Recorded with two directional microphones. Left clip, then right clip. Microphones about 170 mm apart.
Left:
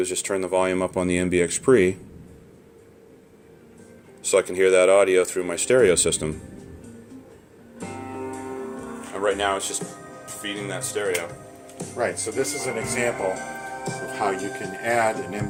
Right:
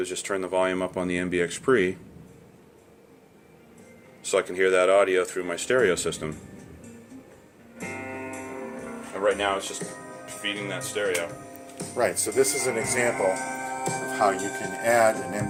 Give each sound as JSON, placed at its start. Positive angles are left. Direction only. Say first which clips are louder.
{"t": 0.0, "sound": "speech", "louder": "left 4 dB", "side_deg": 40}
{"t": 4.2, "sound": "speech", "louder": "left 4 dB", "side_deg": 40}
{"t": 7.9, "sound": "music", "louder": "left 3 dB", "side_deg": -5}
{"t": 9.2, "sound": "speech", "louder": "left 1 dB", "side_deg": 55}
{"t": 11.9, "sound": "speech", "louder": "right 2 dB", "side_deg": -60}